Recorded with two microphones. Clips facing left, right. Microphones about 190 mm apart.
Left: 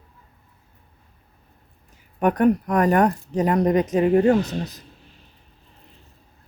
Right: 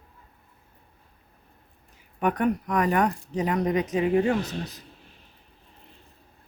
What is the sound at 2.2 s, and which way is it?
Speech, 45° left (ahead or behind).